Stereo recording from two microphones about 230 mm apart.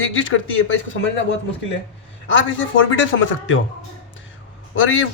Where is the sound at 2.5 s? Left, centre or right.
Left.